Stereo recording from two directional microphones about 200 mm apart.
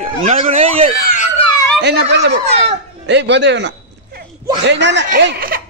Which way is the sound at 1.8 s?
55° right (ahead or behind).